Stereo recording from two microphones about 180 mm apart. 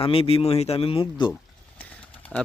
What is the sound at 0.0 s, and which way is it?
Speech, 30° left (ahead or behind).